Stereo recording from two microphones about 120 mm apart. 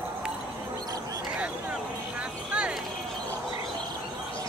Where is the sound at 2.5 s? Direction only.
10° right (ahead or behind).